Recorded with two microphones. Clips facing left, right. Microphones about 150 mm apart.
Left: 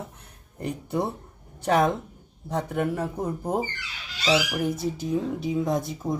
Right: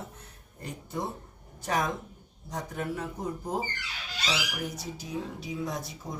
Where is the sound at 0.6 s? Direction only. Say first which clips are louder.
Left 7 dB; 65° left (ahead or behind).